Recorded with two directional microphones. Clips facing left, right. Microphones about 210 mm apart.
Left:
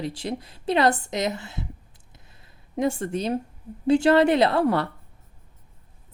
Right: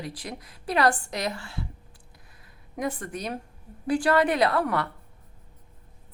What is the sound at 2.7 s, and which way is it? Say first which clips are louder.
Speech: left 6 dB; 25° left (ahead or behind).